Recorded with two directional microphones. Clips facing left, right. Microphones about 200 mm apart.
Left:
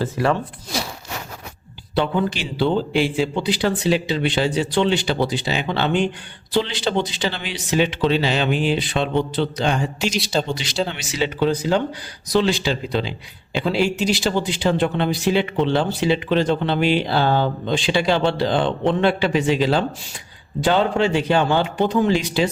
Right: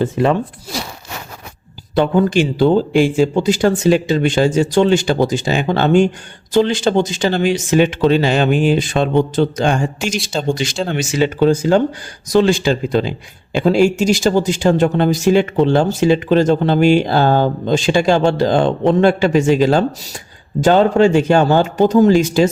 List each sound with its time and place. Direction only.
0.0 s speech: 20° right (ahead or behind)
2.0 s speech: 50° right (ahead or behind)